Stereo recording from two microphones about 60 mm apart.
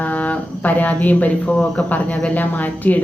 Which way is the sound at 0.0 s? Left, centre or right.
Left.